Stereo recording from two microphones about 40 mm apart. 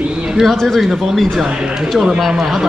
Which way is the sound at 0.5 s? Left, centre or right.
Centre.